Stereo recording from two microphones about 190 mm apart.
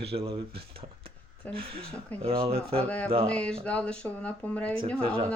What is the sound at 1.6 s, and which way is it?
Speech, 30° right (ahead or behind).